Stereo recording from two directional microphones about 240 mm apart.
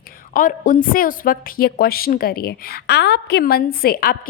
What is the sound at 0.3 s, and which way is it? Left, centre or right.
A woman's voice, left.